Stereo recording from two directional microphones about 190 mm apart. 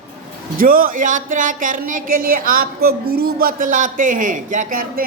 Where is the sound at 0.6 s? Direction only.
50° right (ahead or behind).